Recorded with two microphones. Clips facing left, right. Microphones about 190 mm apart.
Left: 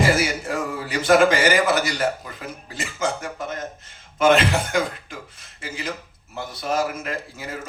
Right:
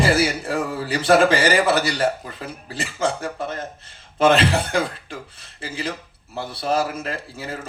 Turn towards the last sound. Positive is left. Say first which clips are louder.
# right 1 dB
turn(degrees=-30)  # may be behind; listen again after turning